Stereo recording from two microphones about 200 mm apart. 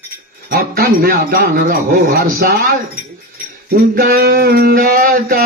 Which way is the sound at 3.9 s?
50° right (ahead or behind).